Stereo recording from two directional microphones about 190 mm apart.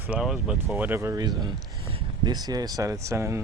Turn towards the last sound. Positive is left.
turn(degrees=-15)  # may be behind; listen again after turning